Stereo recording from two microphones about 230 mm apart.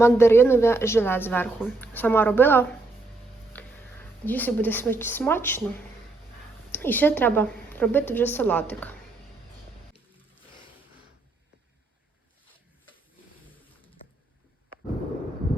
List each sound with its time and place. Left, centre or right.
0.0 s a woman's voice: centre
6.7 s a woman's voice: centre
13.7 s a sound: left